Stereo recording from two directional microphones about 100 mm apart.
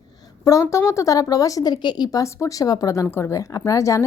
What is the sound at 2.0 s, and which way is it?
A woman's voice, 35° left (ahead or behind).